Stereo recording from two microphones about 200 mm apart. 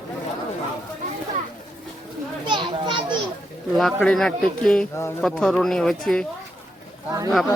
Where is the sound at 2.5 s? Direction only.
25° right (ahead or behind).